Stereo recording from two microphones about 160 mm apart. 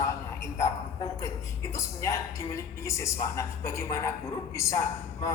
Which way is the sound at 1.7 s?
20° left (ahead or behind).